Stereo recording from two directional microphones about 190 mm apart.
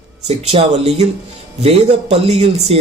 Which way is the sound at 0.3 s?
35° right (ahead or behind).